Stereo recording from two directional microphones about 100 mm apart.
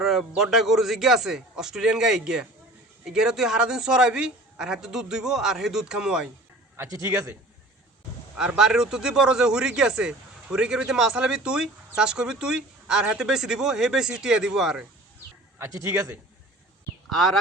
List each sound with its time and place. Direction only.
0.0 s a man's voice: 5° right (ahead or behind)
6.7 s a man's voice: 35° right (ahead or behind)
8.4 s speech: 5° right (ahead or behind)
15.5 s a man's voice: 30° right (ahead or behind)
17.1 s a man's voice: 5° left (ahead or behind)